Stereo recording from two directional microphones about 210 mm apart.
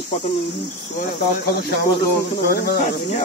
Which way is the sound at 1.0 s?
50° left (ahead or behind).